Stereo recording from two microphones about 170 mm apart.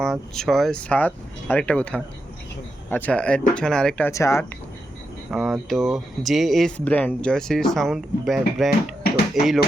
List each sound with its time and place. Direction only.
0.0 s speech: centre (ahead or behind)
4.1 s speech: 15° left (ahead or behind)
5.3 s speech: centre (ahead or behind)